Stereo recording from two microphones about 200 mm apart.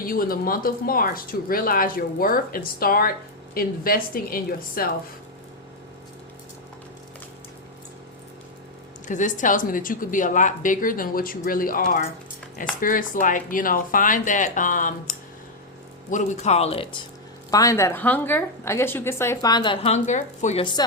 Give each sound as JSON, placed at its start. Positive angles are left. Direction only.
{"t": 0.0, "sound": "speech", "side_deg": 45}
{"t": 9.0, "sound": "speech", "side_deg": 40}
{"t": 17.5, "sound": "a woman's voice", "side_deg": 15}